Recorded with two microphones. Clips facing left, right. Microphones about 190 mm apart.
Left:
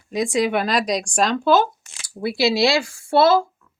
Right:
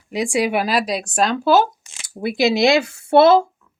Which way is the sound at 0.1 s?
10° right (ahead or behind).